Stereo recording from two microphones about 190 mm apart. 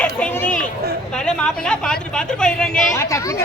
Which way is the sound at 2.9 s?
15° left (ahead or behind).